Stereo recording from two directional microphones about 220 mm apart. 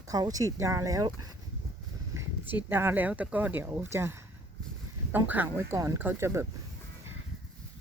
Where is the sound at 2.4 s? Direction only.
10° right (ahead or behind).